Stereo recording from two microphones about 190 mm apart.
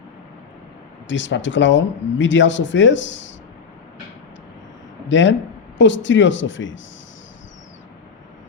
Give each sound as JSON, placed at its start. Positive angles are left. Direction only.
{"t": 1.0, "sound": "speech", "side_deg": 75}
{"t": 5.0, "sound": "speech", "side_deg": 75}